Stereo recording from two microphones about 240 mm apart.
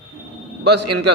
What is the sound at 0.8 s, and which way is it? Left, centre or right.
Speech, right.